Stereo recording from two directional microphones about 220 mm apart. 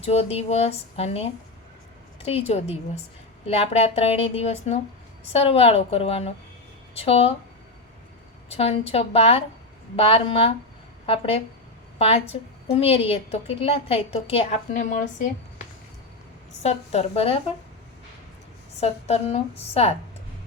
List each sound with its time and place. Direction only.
0.0 s a woman's voice: 25° left (ahead or behind)
8.4 s a woman's voice: 25° left (ahead or behind)
16.6 s a woman's voice: 30° left (ahead or behind)
18.8 s a woman's voice: 30° left (ahead or behind)